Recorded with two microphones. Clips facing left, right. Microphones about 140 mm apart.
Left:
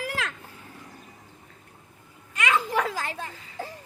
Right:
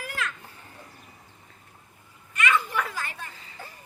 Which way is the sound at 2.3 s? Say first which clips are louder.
Left 1 dB; 90° left.